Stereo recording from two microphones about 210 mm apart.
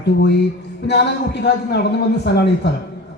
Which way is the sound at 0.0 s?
55° left (ahead or behind).